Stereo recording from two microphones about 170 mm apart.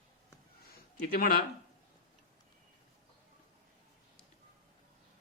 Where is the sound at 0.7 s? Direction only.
60° left (ahead or behind).